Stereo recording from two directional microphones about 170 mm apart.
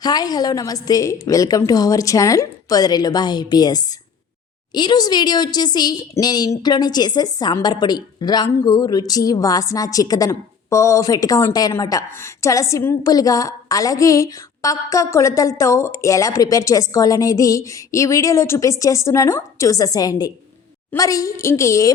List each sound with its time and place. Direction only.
0.0 s a woman's voice: 25° left (ahead or behind)